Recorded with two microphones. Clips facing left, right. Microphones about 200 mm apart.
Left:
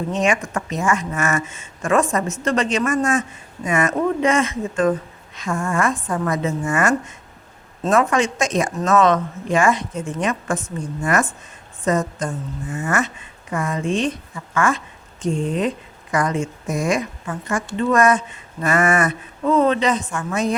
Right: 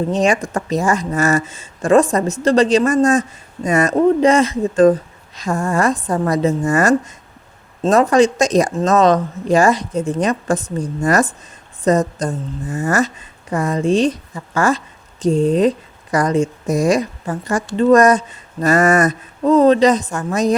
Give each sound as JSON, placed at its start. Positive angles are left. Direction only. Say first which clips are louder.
{"t": 0.1, "sound": "speech", "louder": "right 4 dB", "side_deg": -35}